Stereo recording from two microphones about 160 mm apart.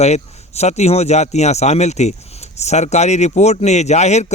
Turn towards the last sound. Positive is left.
turn(degrees=45)  # may be behind; listen again after turning